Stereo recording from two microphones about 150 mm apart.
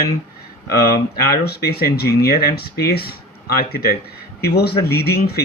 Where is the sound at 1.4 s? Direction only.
90° left.